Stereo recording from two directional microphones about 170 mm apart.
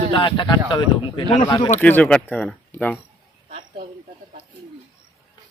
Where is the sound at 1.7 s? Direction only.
10° left (ahead or behind).